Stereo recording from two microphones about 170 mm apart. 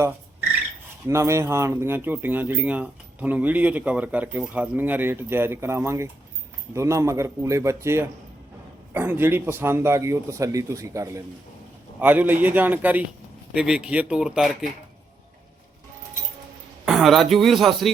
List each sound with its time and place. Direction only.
1.0 s speech: 15° right (ahead or behind); by 14.7 s centre (ahead or behind)
16.8 s a man's voice: centre (ahead or behind)